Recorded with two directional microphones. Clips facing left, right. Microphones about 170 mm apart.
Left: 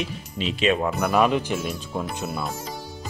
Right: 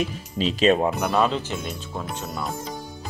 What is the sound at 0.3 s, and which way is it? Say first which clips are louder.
Speech: right 3 dB; 35° right (ahead or behind).